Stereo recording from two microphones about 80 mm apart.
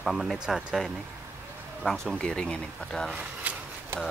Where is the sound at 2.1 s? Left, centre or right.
Centre.